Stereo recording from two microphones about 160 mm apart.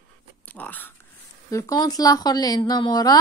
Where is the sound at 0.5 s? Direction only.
10° left (ahead or behind).